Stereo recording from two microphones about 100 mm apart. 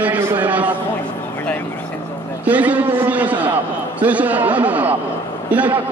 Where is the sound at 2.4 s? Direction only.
15° right (ahead or behind).